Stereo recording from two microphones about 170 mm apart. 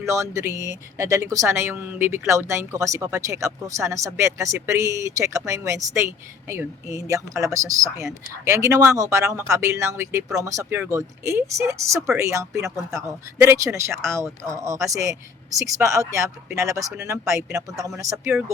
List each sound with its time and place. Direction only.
0.0 s speech: 20° right (ahead or behind)